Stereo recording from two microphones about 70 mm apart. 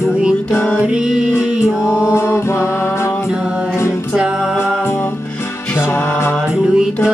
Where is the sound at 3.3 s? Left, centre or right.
Centre.